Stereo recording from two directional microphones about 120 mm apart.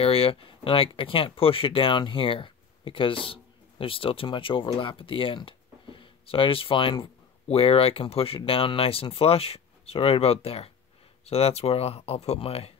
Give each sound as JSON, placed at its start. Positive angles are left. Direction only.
{"t": 0.0, "sound": "speech", "side_deg": 50}